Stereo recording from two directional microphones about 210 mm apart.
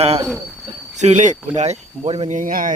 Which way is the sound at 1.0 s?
35° right (ahead or behind).